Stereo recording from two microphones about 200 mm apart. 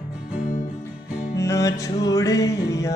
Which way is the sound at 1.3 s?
15° left (ahead or behind).